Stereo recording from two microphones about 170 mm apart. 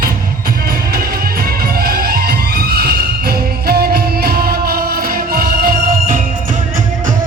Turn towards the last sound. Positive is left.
turn(degrees=-60)  # may be behind; listen again after turning